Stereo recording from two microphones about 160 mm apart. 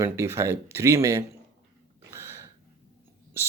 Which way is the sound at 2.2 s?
15° right (ahead or behind).